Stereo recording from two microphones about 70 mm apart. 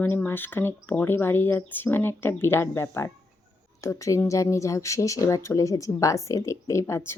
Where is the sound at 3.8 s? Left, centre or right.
Left.